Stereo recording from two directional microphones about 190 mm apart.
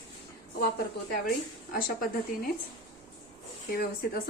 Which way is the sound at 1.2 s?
50° left (ahead or behind).